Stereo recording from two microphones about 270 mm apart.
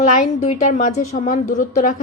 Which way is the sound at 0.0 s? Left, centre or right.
Left.